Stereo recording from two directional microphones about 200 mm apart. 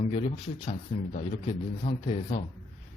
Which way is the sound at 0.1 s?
35° left (ahead or behind).